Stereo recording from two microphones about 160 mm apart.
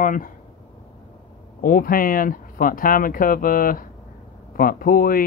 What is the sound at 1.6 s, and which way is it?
Speech, 65° left (ahead or behind).